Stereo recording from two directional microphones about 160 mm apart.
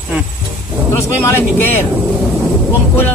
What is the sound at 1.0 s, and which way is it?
Speech, 15° left (ahead or behind).